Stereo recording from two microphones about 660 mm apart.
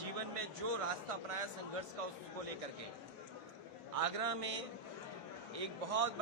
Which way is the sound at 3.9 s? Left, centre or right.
Right.